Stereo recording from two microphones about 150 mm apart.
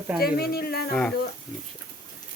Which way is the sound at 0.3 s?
90° left.